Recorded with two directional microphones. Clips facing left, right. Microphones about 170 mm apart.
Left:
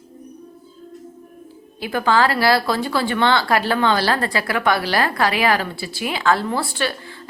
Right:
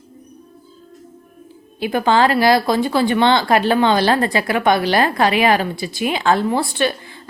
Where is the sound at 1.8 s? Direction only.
20° right (ahead or behind).